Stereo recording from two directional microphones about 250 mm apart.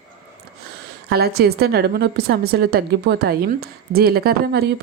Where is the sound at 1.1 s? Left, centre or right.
Right.